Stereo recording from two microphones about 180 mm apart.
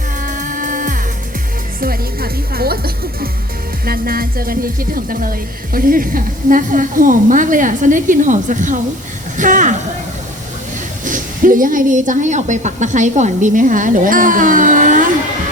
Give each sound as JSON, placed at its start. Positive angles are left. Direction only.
{"t": 0.2, "sound": "music", "side_deg": -45}
{"t": 1.8, "sound": "speech", "side_deg": -55}
{"t": 11.0, "sound": "speech", "side_deg": -50}